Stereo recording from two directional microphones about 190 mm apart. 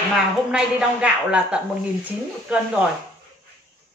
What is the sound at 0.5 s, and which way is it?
Speech, 5° right (ahead or behind).